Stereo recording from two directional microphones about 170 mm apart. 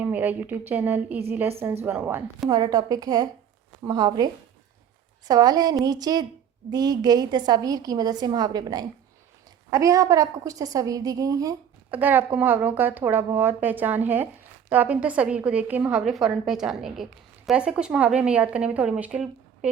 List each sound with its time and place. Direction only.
0.0 s a woman's voice: 10° right (ahead or behind)
2.5 s a woman's voice: 25° right (ahead or behind)
5.3 s a woman's voice: 20° right (ahead or behind)
11.9 s a woman's voice: 10° right (ahead or behind)